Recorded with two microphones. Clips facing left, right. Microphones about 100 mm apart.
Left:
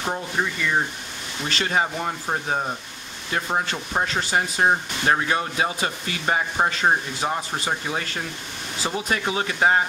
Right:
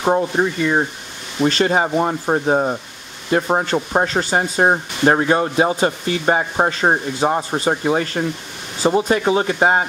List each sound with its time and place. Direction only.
0.0 s speech: 35° right (ahead or behind)